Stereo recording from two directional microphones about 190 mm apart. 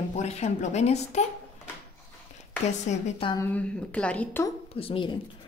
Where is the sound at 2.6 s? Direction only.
35° left (ahead or behind).